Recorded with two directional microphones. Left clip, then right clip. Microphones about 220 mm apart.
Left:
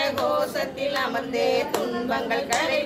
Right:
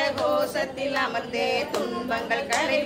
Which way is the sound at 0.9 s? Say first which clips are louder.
Left 1 dB; 10° right (ahead or behind).